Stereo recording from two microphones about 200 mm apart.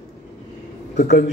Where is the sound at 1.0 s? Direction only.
50° left (ahead or behind).